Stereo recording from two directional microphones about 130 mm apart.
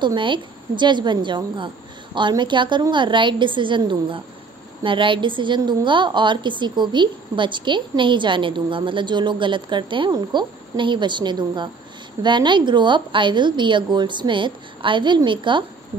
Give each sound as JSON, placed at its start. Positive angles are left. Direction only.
{"t": 0.0, "sound": "a woman's voice", "side_deg": -35}